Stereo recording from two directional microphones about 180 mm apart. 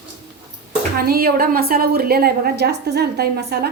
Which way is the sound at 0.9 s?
60° right (ahead or behind).